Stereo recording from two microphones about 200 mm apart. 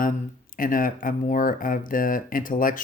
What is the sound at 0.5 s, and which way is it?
Speech, 45° left (ahead or behind).